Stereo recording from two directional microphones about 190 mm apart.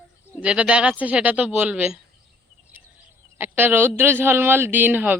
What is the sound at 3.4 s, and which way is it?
Speech, 10° right (ahead or behind).